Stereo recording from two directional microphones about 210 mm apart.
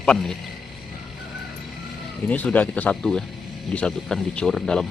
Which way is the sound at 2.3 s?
5° left (ahead or behind).